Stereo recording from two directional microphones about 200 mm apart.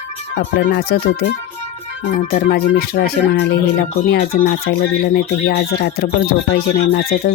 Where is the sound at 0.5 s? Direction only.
50° left (ahead or behind).